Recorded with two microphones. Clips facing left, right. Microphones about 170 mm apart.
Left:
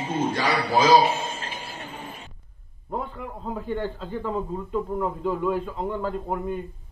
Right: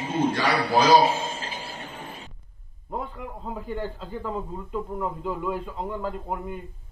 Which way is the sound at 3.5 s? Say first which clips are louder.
Left 3 dB; 5° right (ahead or behind).